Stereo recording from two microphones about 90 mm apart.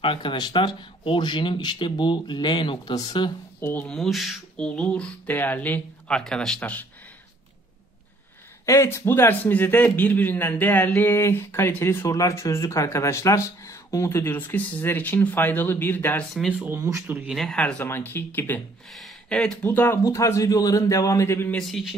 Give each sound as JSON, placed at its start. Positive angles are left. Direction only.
{"t": 0.0, "sound": "speech", "side_deg": 70}
{"t": 2.9, "sound": "speech", "side_deg": 50}
{"t": 3.8, "sound": "speech", "side_deg": 5}
{"t": 4.6, "sound": "speech", "side_deg": 10}
{"t": 8.6, "sound": "speech", "side_deg": 35}
{"t": 16.5, "sound": "speech", "side_deg": -20}
{"t": 17.3, "sound": "speech", "side_deg": 0}
{"t": 17.6, "sound": "speech", "side_deg": 15}
{"t": 18.9, "sound": "speech", "side_deg": 10}
{"t": 20.0, "sound": "speech", "side_deg": 35}
{"t": 21.5, "sound": "speech", "side_deg": 5}